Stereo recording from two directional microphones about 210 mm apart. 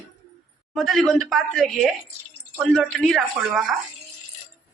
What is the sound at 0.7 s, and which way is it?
Speech, centre (ahead or behind).